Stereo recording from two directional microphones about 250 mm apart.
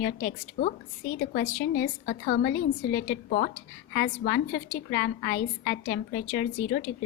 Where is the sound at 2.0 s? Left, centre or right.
Left.